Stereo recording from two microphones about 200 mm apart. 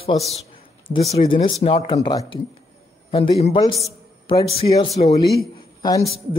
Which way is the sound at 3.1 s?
30° left (ahead or behind).